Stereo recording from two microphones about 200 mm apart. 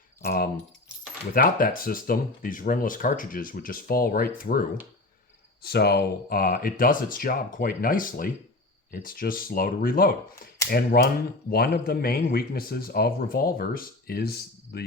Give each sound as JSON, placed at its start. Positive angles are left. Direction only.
{"t": 0.3, "sound": "keys jangling", "side_deg": 50}
{"t": 1.3, "sound": "speech", "side_deg": 45}
{"t": 5.6, "sound": "speech", "side_deg": 55}